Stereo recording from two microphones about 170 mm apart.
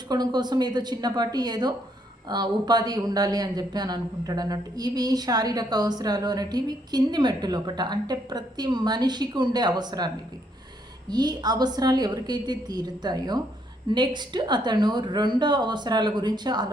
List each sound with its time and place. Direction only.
0.1 s speech: 25° right (ahead or behind)
11.1 s speech: 25° right (ahead or behind)